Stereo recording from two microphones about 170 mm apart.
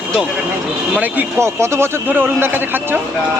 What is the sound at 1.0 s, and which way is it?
A man's voice, 10° right (ahead or behind).